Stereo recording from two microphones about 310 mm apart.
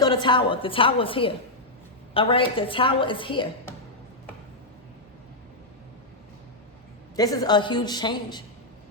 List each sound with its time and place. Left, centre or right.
0.0 s a woman's voice: centre
7.2 s a woman's voice: centre